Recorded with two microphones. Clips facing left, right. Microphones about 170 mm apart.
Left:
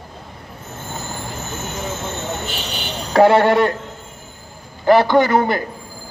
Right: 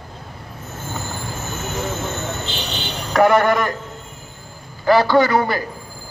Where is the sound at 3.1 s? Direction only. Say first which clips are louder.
Left 2 dB; 30° left (ahead or behind).